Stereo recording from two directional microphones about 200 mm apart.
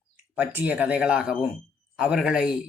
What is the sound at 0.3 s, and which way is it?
Speech, 10° right (ahead or behind).